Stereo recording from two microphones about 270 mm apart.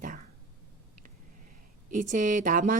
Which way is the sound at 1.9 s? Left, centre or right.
Right.